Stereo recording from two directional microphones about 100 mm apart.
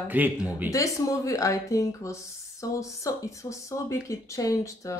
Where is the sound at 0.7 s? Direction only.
35° left (ahead or behind).